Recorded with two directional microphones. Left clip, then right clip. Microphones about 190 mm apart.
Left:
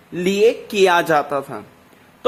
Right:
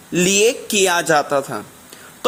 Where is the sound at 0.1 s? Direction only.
25° right (ahead or behind).